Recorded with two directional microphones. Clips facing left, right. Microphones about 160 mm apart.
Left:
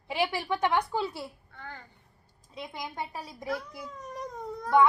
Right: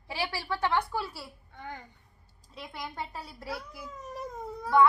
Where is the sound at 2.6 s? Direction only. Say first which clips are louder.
Left 2 dB; 15° left (ahead or behind).